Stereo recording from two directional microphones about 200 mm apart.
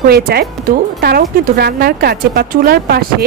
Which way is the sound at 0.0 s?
50° right (ahead or behind).